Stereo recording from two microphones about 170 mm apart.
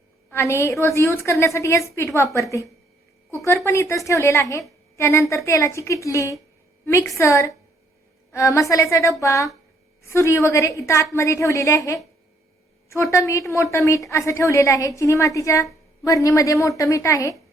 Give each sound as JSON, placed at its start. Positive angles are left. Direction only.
{"t": 0.3, "sound": "a woman's voice", "side_deg": 15}